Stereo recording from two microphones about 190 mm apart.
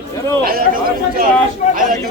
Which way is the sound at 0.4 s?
50° right (ahead or behind).